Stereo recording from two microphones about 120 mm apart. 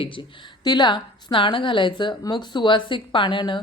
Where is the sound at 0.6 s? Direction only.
35° left (ahead or behind).